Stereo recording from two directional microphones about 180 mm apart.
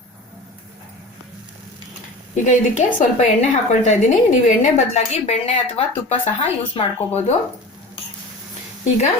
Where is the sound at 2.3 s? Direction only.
40° left (ahead or behind).